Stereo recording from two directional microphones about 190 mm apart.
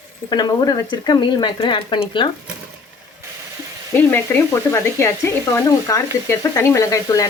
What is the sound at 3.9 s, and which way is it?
Speech, 10° left (ahead or behind).